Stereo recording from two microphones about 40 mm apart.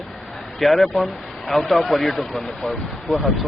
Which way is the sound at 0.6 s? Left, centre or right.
Centre.